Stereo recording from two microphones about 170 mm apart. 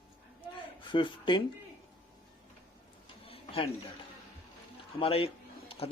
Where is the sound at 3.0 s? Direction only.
35° left (ahead or behind).